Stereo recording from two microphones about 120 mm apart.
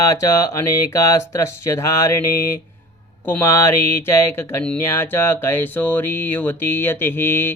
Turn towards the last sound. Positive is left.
turn(degrees=20)  # may be behind; listen again after turning